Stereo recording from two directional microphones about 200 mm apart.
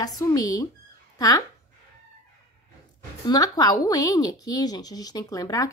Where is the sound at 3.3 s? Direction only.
20° left (ahead or behind).